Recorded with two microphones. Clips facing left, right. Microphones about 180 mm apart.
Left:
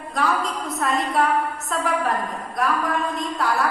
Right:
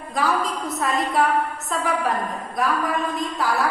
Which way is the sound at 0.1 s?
Centre (ahead or behind).